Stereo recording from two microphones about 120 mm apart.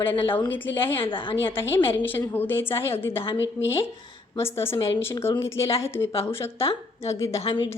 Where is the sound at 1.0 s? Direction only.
45° left (ahead or behind).